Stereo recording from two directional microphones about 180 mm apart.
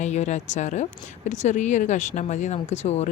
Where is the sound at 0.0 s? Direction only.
40° left (ahead or behind).